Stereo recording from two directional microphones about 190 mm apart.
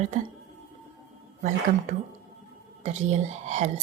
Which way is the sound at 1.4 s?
45° right (ahead or behind).